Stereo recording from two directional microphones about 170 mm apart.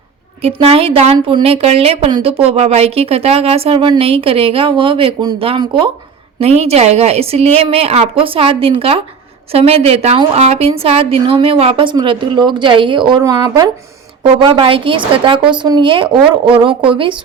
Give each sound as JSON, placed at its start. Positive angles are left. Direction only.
{"t": 0.4, "sound": "a woman's voice", "side_deg": -35}